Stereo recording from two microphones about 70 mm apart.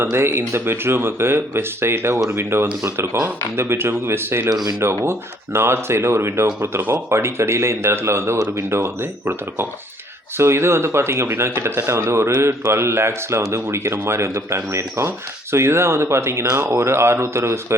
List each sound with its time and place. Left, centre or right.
0.0 s speech: right
4.4 s speech: right
5.5 s speech: right